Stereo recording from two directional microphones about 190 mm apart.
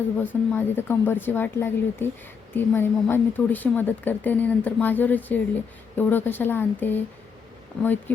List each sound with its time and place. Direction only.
0.2 s a woman's voice: 10° left (ahead or behind)